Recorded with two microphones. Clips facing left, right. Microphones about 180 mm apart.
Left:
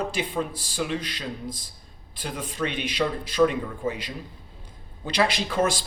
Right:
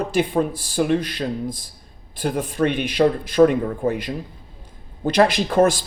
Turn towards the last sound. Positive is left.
turn(degrees=-50)  # may be behind; listen again after turning